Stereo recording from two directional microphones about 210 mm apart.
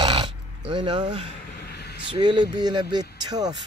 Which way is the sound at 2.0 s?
20° right (ahead or behind).